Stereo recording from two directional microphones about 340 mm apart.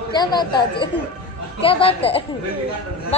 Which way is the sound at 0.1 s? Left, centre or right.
Centre.